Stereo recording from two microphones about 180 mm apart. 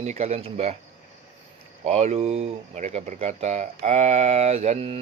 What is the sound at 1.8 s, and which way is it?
Speech, 40° right (ahead or behind).